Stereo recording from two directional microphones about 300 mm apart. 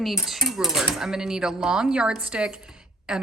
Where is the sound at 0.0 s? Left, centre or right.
Centre.